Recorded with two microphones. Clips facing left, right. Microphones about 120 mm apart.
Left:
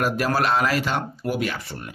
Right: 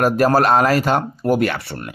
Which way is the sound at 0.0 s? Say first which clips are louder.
Right 7 dB; 45° right (ahead or behind).